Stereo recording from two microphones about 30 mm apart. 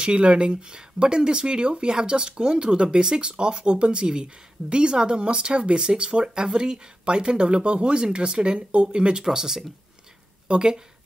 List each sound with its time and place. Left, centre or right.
0.0 s speech: right
6.2 s speech: right
9.2 s speech: centre
10.5 s speech: right